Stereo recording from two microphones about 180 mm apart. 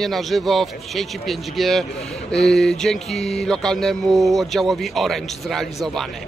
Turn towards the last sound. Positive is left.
turn(degrees=0)  # may be behind; listen again after turning